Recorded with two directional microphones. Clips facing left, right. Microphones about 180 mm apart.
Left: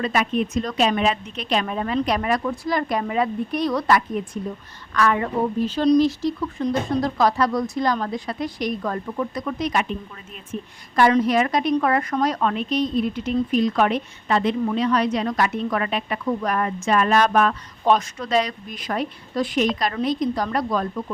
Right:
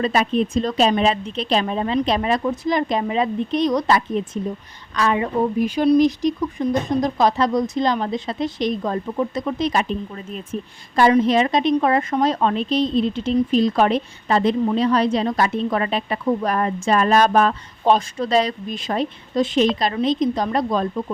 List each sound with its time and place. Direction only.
0.0 s a woman's voice: 30° right (ahead or behind)